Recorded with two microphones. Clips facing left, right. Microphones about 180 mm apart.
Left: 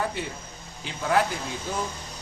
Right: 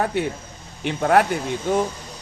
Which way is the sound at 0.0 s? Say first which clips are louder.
Right 7 dB; 65° right (ahead or behind).